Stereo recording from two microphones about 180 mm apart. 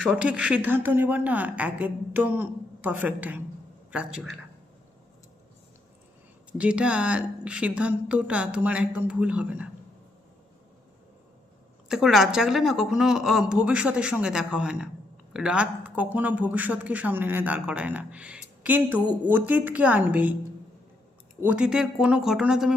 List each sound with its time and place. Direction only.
0.0 s a woman's voice: 5° right (ahead or behind)
6.5 s speech: 5° right (ahead or behind)
11.9 s a woman's voice: 5° right (ahead or behind)
21.4 s a woman's voice: 5° right (ahead or behind)